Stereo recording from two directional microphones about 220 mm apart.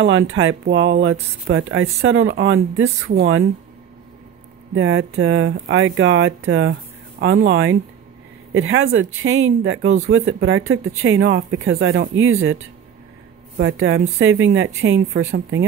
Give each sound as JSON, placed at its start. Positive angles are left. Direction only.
{"t": 0.0, "sound": "speech", "side_deg": -65}
{"t": 1.5, "sound": "speech", "side_deg": -65}
{"t": 4.7, "sound": "speech", "side_deg": -65}
{"t": 13.6, "sound": "speech", "side_deg": -60}